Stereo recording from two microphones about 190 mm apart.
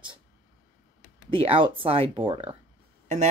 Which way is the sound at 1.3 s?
30° right (ahead or behind).